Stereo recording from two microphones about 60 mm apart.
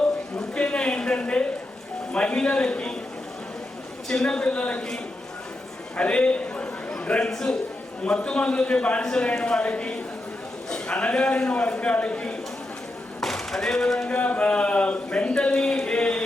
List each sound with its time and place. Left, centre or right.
0.3 s a sound: centre
2.1 s a man's voice: centre
4.1 s a man's voice: centre
6.0 s a sound: centre
7.3 s a man's voice: centre
13.2 s speech: centre
14.1 s speech: left